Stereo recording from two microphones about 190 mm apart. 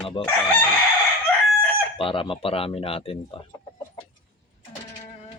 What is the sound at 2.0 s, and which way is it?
Speech, 25° left (ahead or behind).